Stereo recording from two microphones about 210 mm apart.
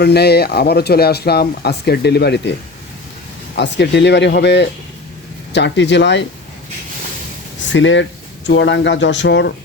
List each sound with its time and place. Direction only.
0.0 s speech: 50° left (ahead or behind)
3.6 s speech: 55° left (ahead or behind)
7.7 s speech: 60° left (ahead or behind)